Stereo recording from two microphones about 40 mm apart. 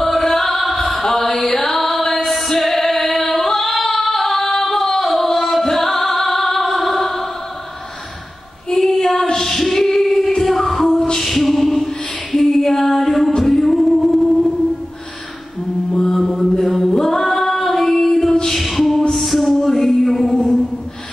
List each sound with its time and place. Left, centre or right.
0.0 s music: centre
2.2 s singing: centre
8.7 s female singing: centre
11.1 s a sound: centre
13.4 s music: centre
15.9 s mantra: centre
16.5 s female singing: centre
18.6 s music: centre
19.6 s a sound: centre